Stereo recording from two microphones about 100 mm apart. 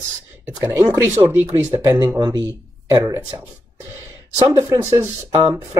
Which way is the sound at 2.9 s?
30° right (ahead or behind).